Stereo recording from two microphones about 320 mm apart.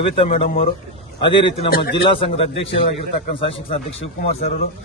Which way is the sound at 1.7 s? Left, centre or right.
Left.